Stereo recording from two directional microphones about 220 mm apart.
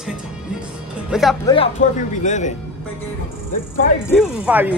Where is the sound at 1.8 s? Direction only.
35° left (ahead or behind).